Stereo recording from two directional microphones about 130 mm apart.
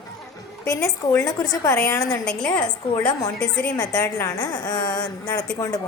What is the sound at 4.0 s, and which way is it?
A woman's voice, 25° left (ahead or behind).